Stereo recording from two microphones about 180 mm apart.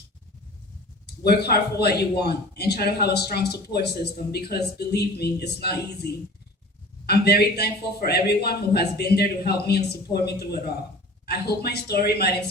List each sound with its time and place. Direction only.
1.0 s a man's voice: 60° left (ahead or behind)